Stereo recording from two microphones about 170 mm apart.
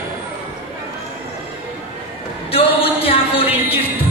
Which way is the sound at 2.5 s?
35° left (ahead or behind).